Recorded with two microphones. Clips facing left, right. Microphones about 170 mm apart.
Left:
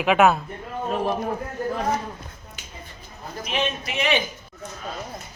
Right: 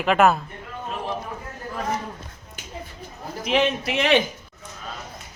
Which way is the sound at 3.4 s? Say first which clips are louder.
Right 6 dB; 85° right.